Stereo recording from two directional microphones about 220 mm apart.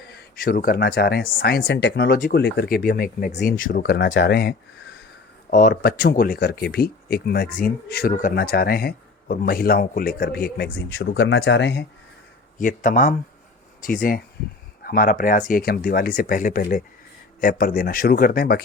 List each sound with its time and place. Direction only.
0.1 s speech: 45° left (ahead or behind)
2.1 s speech: 35° left (ahead or behind)
2.4 s speech: 50° left (ahead or behind)
12.5 s speech: 35° left (ahead or behind)